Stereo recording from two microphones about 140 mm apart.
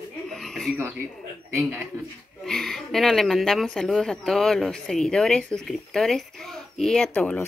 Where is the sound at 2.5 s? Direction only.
5° left (ahead or behind).